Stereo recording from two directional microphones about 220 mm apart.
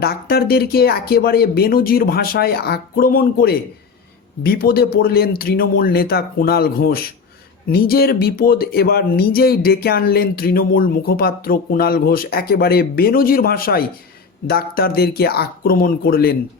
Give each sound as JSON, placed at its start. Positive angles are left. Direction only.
{"t": 0.0, "sound": "speech", "side_deg": 45}